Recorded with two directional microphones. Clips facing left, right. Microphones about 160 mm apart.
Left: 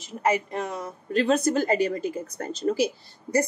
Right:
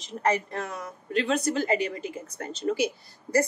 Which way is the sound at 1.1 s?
40° left (ahead or behind).